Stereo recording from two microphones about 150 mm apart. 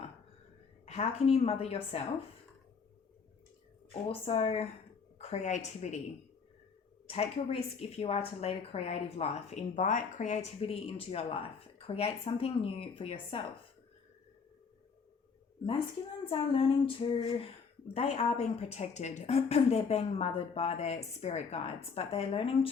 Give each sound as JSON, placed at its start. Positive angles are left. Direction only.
{"t": 0.9, "sound": "a woman's voice", "side_deg": 45}
{"t": 4.1, "sound": "a woman's voice", "side_deg": 40}
{"t": 7.1, "sound": "a woman's voice", "side_deg": 45}
{"t": 10.6, "sound": "speech", "side_deg": 40}
{"t": 16.3, "sound": "a woman's voice", "side_deg": 35}